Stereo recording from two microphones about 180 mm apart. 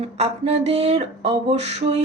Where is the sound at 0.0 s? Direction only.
35° right (ahead or behind).